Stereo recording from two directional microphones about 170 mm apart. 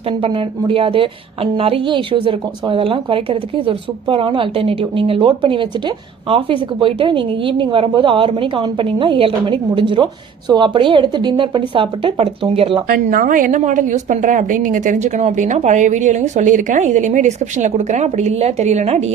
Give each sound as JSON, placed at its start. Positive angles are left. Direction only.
{"t": 0.2, "sound": "a woman's voice", "side_deg": -30}
{"t": 12.9, "sound": "a woman's voice", "side_deg": -55}